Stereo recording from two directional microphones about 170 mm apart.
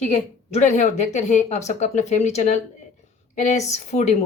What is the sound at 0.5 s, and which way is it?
Speech, 45° left (ahead or behind).